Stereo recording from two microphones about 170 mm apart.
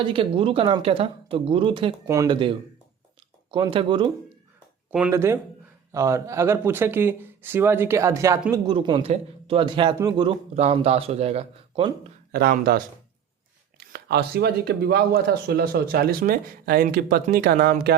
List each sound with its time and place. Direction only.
0.0 s a woman's voice: 30° right (ahead or behind)
4.9 s speech: 5° right (ahead or behind)
5.1 s speech: 15° right (ahead or behind)
10.5 s a woman's voice: 40° right (ahead or behind)
12.3 s speech: 65° right (ahead or behind)